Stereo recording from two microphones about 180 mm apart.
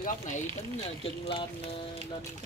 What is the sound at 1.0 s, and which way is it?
Speech, 30° left (ahead or behind).